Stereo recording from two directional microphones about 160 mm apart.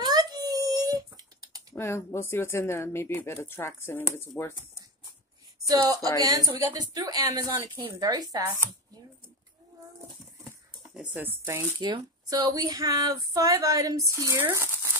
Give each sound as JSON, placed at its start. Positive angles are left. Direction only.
{"t": 0.0, "sound": "a sound", "side_deg": -25}
{"t": 1.8, "sound": "speech", "side_deg": 15}
{"t": 6.1, "sound": "speech", "side_deg": -25}
{"t": 11.0, "sound": "speech", "side_deg": -15}
{"t": 11.8, "sound": "speech", "side_deg": -25}